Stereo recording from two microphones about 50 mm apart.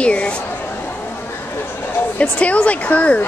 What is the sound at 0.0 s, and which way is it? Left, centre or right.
Speech, left.